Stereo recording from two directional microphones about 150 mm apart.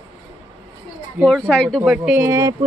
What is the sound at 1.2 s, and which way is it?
Speech, 5° left (ahead or behind).